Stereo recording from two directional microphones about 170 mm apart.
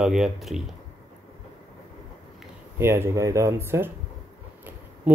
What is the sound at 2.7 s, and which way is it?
Speech, 15° right (ahead or behind).